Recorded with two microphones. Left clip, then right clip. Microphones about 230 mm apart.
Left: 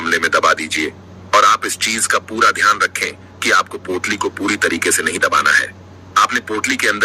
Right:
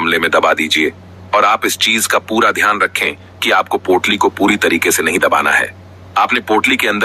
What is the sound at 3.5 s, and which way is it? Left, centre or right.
Speech, right.